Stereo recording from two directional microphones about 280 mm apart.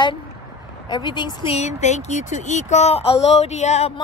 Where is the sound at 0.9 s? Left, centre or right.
Centre.